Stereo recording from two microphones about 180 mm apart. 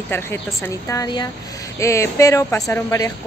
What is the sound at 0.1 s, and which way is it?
Speech, 15° left (ahead or behind).